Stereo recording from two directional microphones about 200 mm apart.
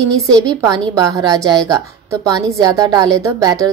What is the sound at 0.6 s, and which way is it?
A woman's voice, 20° right (ahead or behind).